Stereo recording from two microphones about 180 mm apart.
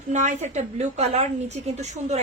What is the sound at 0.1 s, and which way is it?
A woman's voice, 40° right (ahead or behind).